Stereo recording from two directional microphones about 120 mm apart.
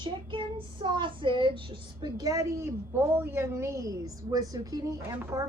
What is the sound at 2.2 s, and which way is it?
A woman's voice, 30° right (ahead or behind).